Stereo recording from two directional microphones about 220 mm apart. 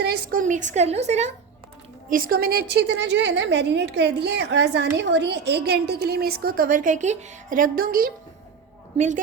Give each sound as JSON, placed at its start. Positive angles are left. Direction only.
{"t": 0.0, "sound": "a woman's voice", "side_deg": -45}